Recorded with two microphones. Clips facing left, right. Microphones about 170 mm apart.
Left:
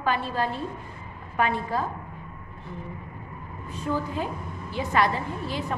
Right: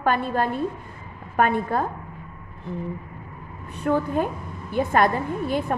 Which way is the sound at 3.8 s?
60° right (ahead or behind).